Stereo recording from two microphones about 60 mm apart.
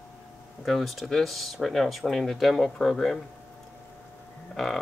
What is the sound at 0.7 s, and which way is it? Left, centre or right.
Speech, centre.